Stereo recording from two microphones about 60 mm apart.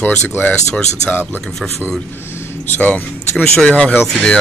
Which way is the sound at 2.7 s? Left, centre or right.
Left.